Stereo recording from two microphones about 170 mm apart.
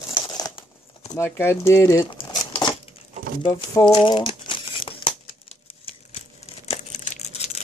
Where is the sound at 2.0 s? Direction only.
25° left (ahead or behind).